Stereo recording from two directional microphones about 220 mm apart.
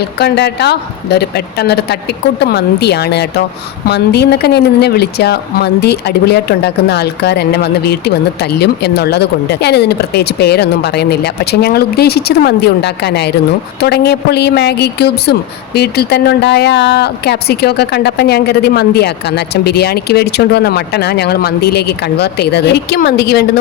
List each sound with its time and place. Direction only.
0.0 s a woman's voice: 50° left (ahead or behind)